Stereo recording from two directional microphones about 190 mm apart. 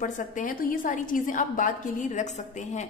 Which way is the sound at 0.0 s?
45° left (ahead or behind).